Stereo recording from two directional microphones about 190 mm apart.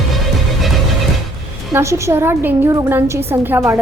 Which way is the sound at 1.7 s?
15° right (ahead or behind).